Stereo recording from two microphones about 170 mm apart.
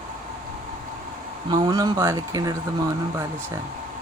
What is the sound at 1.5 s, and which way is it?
Speech, 25° right (ahead or behind).